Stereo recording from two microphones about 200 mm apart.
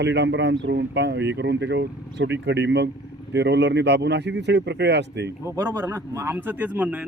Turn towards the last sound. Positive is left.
turn(degrees=-5)  # may be behind; listen again after turning